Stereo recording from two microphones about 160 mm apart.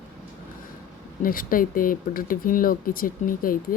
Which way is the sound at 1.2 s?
60° left (ahead or behind).